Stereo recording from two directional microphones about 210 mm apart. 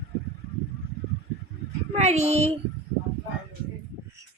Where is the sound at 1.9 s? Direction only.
30° right (ahead or behind).